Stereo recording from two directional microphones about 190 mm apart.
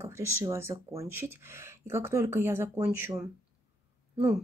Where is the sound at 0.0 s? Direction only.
15° right (ahead or behind).